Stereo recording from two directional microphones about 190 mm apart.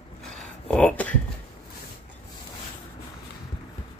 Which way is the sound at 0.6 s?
5° left (ahead or behind).